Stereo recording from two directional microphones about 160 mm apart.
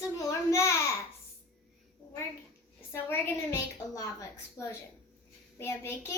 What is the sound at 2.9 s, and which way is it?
A child's voice, 15° left (ahead or behind).